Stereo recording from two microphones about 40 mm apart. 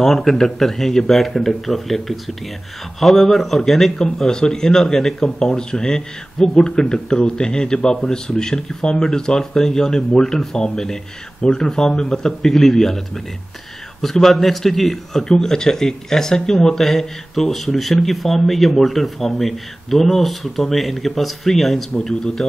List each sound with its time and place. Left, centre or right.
0.0 s a man's voice: centre
5.4 s a man's voice: centre
11.4 s a man's voice: centre
12.4 s a man's voice: centre
15.2 s a man's voice: centre